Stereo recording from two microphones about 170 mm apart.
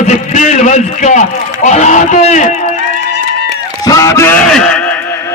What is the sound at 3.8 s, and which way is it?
Speech, 20° left (ahead or behind).